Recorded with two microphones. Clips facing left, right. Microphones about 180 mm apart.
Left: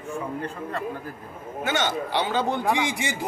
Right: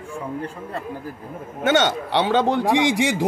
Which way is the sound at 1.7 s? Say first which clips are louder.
Right 7 dB; 75° right (ahead or behind).